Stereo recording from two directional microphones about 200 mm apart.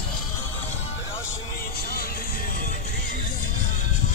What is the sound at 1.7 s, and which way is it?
Music, 50° left (ahead or behind).